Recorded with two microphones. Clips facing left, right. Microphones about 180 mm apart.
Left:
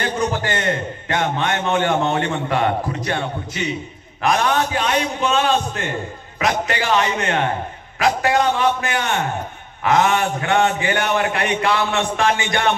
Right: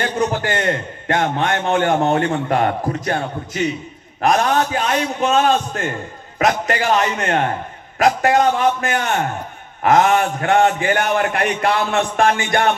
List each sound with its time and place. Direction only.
0.0 s a man's voice: 50° right (ahead or behind)